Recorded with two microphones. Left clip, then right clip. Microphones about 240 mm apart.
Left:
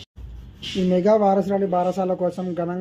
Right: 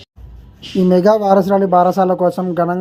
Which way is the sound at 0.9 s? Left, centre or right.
Right.